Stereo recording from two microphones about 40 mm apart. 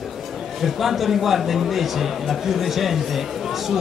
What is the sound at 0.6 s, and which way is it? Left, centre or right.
Speech, centre.